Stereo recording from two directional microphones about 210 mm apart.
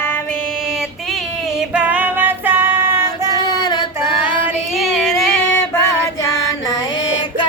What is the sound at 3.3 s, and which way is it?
Child singing, 20° left (ahead or behind).